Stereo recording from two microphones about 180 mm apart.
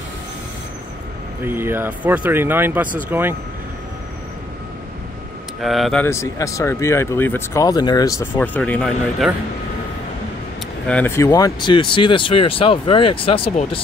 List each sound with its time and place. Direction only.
1.4 s speech: 10° right (ahead or behind)
5.6 s speech: centre (ahead or behind)
6.0 s speech: 15° left (ahead or behind)
8.4 s speech: 10° left (ahead or behind)
10.9 s speech: 10° left (ahead or behind); by 13.7 s 30° left (ahead or behind)